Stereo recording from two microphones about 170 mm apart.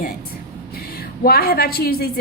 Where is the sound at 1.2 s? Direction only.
65° left (ahead or behind).